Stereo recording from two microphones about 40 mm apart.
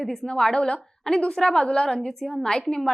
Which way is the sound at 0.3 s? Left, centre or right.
Centre.